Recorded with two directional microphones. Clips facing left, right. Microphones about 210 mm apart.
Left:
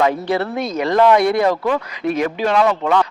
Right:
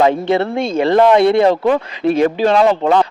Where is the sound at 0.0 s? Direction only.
25° right (ahead or behind).